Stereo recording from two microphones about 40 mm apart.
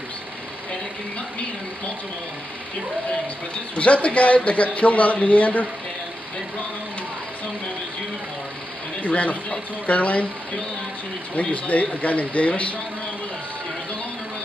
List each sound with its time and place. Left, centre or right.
3.7 s speech: left
9.0 s speech: left
11.3 s speech: left